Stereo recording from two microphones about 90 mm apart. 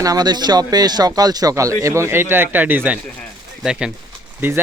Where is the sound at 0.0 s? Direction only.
45° right (ahead or behind); by 3.0 s 20° right (ahead or behind).